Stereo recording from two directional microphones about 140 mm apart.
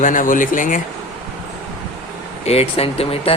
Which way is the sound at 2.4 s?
45° left (ahead or behind).